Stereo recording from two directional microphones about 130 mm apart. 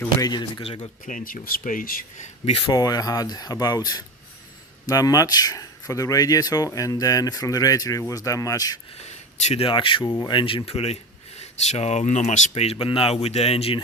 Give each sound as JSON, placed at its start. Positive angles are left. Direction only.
{"t": 0.2, "sound": "speech", "side_deg": 30}
{"t": 0.6, "sound": "speech", "side_deg": 50}
{"t": 1.0, "sound": "speech", "side_deg": 90}
{"t": 2.4, "sound": "speech", "side_deg": 45}
{"t": 2.7, "sound": "speech", "side_deg": 30}
{"t": 9.0, "sound": "speech", "side_deg": 60}